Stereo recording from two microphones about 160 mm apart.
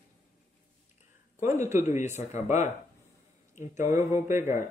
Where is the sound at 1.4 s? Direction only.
15° right (ahead or behind).